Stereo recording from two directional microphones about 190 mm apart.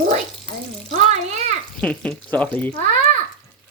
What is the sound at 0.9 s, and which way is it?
Speech, 35° right (ahead or behind).